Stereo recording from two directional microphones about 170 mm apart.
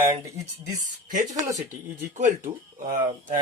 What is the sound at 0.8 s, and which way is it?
Speech, 50° right (ahead or behind).